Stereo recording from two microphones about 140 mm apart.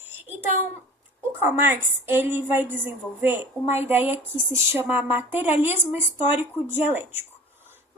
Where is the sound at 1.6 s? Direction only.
15° right (ahead or behind).